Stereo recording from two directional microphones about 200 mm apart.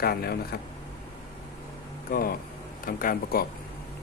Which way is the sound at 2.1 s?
45° left (ahead or behind).